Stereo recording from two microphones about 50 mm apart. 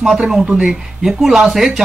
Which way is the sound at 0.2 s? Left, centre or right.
Centre.